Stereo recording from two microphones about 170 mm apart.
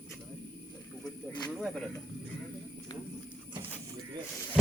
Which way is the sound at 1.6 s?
Centre (ahead or behind).